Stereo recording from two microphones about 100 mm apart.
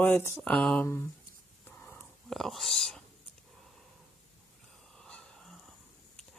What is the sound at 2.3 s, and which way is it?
Speech, centre (ahead or behind).